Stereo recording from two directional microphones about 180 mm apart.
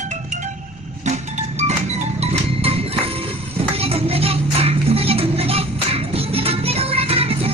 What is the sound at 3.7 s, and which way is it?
Music, 35° right (ahead or behind).